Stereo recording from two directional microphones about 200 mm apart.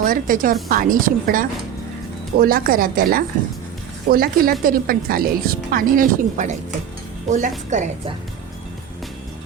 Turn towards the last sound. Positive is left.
turn(degrees=-40)  # may be behind; listen again after turning